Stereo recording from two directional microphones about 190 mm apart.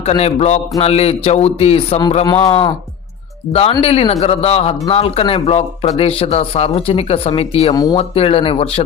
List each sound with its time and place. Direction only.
0.0 s speech: 35° left (ahead or behind)
7.7 s speech: 20° left (ahead or behind)
7.9 s speech: 30° left (ahead or behind)